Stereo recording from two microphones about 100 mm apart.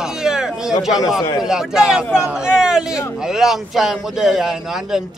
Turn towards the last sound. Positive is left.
turn(degrees=-5)  # may be behind; listen again after turning